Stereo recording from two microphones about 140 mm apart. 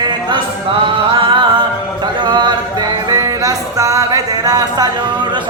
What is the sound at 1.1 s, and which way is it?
A capella, 35° right (ahead or behind).